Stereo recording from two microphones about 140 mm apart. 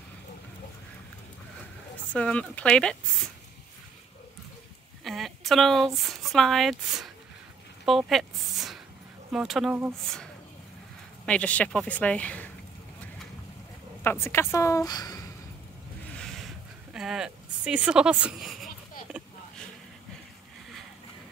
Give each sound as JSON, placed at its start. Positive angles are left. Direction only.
{"t": 2.1, "sound": "speech", "side_deg": 10}
{"t": 5.0, "sound": "a woman's voice", "side_deg": 0}
{"t": 8.1, "sound": "a sound", "side_deg": 0}
{"t": 9.3, "sound": "speech", "side_deg": -5}
{"t": 11.2, "sound": "speech", "side_deg": 10}
{"t": 14.0, "sound": "a woman's voice", "side_deg": 15}
{"t": 16.1, "sound": "a sound", "side_deg": 5}
{"t": 16.9, "sound": "speech", "side_deg": -5}